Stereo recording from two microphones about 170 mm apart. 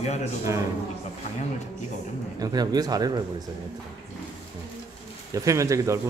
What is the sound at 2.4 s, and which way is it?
Speech, 25° right (ahead or behind).